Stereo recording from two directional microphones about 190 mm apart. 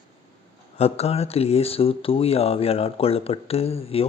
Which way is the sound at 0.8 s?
35° left (ahead or behind).